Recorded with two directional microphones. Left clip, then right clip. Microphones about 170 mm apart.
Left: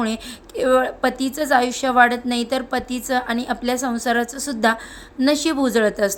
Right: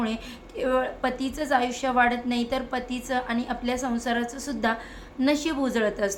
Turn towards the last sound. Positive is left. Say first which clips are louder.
# left 7 dB
turn(degrees=35)  # may be behind; listen again after turning